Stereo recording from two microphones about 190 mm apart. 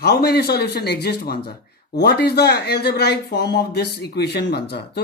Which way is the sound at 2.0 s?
55° left (ahead or behind).